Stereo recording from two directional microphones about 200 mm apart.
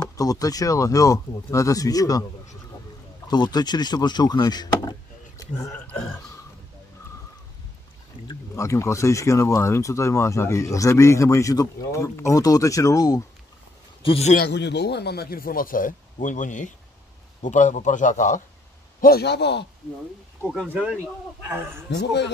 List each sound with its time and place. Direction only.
0.0 s speech: 15° left (ahead or behind)
3.3 s speech: 20° left (ahead or behind)
8.3 s speech: 15° left (ahead or behind)
14.0 s speech: 30° left (ahead or behind)
14.3 s a man's voice: 55° left (ahead or behind)
18.9 s a man's voice: 50° left (ahead or behind)
20.6 s a man's voice: 10° right (ahead or behind)
21.9 s a man's voice: 60° left (ahead or behind)